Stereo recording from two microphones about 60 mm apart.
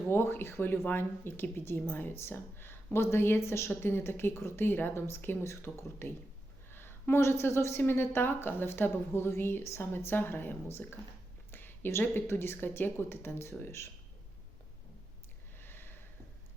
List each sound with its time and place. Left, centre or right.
0.1 s a woman's voice: left
7.8 s a woman's voice: left
15.5 s a sound: left